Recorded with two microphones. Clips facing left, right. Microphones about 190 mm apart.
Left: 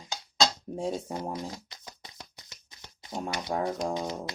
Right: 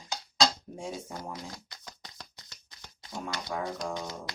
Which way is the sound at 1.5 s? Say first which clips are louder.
Left 3 dB; 20° left (ahead or behind).